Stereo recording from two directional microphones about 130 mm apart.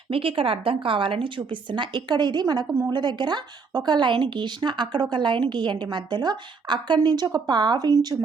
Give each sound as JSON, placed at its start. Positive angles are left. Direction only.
{"t": 0.1, "sound": "speech", "side_deg": -45}